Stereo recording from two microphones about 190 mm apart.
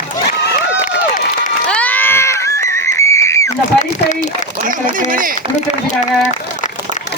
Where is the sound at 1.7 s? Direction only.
10° left (ahead or behind).